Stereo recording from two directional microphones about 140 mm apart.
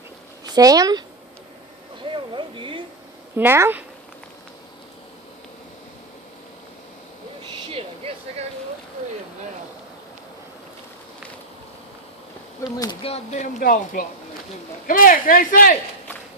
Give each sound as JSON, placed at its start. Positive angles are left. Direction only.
{"t": 0.4, "sound": "speech", "side_deg": -25}
{"t": 2.0, "sound": "a sound", "side_deg": -35}
{"t": 3.3, "sound": "speech", "side_deg": -15}
{"t": 7.7, "sound": "a sound", "side_deg": -45}
{"t": 12.7, "sound": "speech", "side_deg": 25}
{"t": 13.0, "sound": "speech", "side_deg": 45}
{"t": 13.6, "sound": "speech", "side_deg": 80}